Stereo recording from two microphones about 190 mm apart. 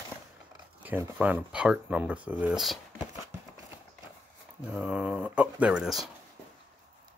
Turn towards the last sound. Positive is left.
turn(degrees=0)  # may be behind; listen again after turning